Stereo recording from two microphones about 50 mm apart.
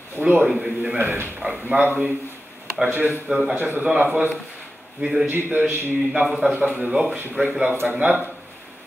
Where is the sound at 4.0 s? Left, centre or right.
Right.